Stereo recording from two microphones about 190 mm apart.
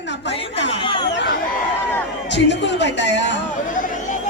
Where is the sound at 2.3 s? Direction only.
65° left (ahead or behind).